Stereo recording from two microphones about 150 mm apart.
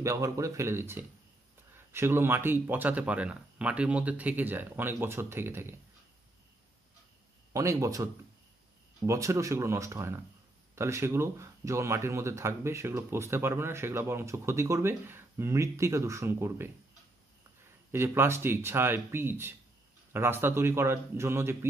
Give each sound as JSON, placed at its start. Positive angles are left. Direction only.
{"t": 0.0, "sound": "speech", "side_deg": -20}
{"t": 7.5, "sound": "speech", "side_deg": -20}
{"t": 17.9, "sound": "speech", "side_deg": -15}